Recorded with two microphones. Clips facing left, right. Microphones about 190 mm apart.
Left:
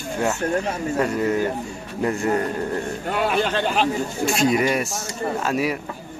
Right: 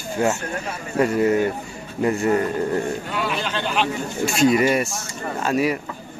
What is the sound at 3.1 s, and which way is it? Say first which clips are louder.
Speech: left 4 dB; 50° left (ahead or behind).